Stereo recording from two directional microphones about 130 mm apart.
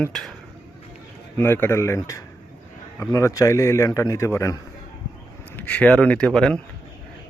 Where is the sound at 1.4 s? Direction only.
15° left (ahead or behind).